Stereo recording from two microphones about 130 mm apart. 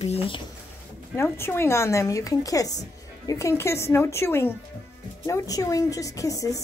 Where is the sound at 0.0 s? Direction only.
50° left (ahead or behind).